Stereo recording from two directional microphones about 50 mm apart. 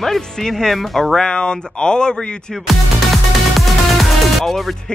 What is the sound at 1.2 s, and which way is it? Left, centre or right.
Speech, centre.